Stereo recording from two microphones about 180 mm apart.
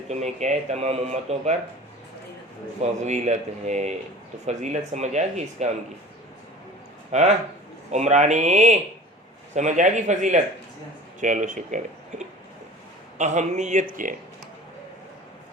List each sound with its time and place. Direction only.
0.1 s speech: 40° right (ahead or behind)
2.8 s speech: 40° right (ahead or behind)
7.1 s speech: 40° right (ahead or behind)